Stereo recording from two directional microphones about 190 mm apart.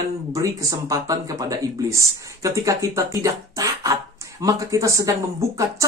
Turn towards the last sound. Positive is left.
turn(degrees=-15)  # may be behind; listen again after turning